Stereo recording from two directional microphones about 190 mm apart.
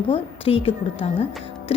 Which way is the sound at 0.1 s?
30° left (ahead or behind).